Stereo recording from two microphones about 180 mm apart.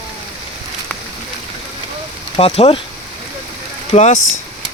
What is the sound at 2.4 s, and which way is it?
Speech, 35° left (ahead or behind).